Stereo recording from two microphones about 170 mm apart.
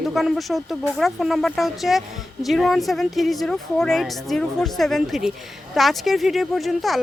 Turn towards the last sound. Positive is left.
turn(degrees=0)  # may be behind; listen again after turning